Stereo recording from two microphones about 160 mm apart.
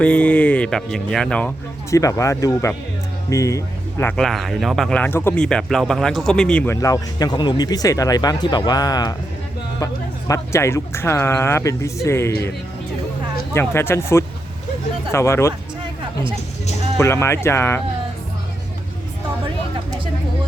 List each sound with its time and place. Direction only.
0.0 s speech: 10° left (ahead or behind)
1.9 s speech: 20° left (ahead or behind)
4.2 s speech: centre (ahead or behind)
6.7 s speech: 20° left (ahead or behind)
13.5 s speech: 15° left (ahead or behind)
17.0 s speech: 15° left (ahead or behind)